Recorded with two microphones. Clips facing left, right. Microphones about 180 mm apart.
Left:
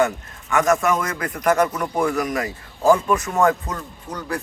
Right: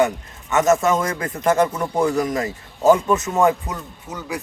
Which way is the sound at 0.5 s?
25° right (ahead or behind).